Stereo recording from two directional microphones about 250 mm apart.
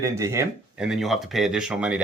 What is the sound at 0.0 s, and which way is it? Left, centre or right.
Speech, centre.